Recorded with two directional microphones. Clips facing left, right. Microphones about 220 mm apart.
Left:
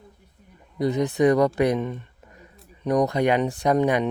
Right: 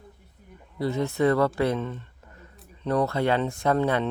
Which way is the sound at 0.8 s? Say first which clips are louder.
Left 4 dB; 20° left (ahead or behind).